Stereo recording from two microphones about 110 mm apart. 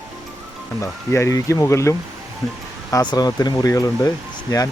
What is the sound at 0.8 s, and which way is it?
Speech, 25° left (ahead or behind).